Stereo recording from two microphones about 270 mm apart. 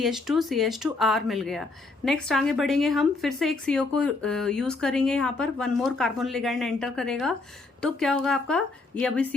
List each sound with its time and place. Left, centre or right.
0.0 s a woman's voice: centre